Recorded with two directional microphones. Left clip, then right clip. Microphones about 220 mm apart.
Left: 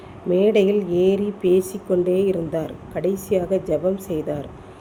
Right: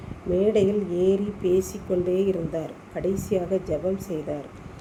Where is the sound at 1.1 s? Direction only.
25° left (ahead or behind).